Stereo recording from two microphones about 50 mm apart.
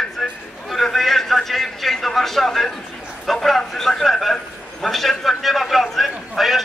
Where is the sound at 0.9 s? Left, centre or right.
Centre.